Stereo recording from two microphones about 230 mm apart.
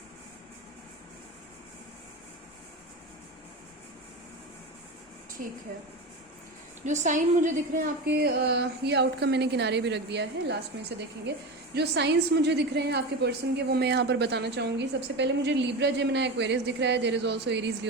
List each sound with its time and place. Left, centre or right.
5.4 s a woman's voice: right
6.8 s a woman's voice: right